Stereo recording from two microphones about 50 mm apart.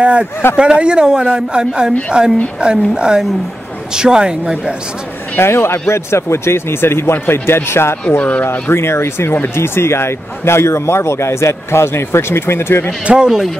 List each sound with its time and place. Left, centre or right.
0.0 s a man's voice: right
5.4 s a man's voice: left
8.2 s speech: left
8.5 s a man's voice: left
13.0 s a man's voice: centre